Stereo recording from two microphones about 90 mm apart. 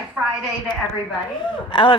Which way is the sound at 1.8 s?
65° left (ahead or behind).